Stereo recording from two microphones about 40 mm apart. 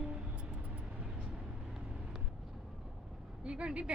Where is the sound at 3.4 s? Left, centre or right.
Right.